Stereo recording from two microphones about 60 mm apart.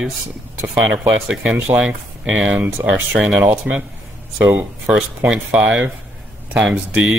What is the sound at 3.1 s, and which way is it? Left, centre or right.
Speech, centre.